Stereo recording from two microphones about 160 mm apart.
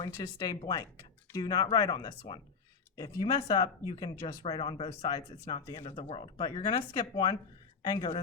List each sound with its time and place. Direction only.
0.0 s speech: 25° left (ahead or behind)